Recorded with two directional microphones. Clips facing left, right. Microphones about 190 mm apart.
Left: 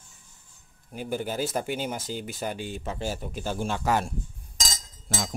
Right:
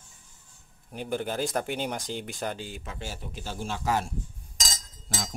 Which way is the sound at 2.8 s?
35° left (ahead or behind).